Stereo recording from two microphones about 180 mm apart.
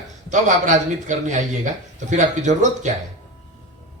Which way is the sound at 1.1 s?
40° right (ahead or behind).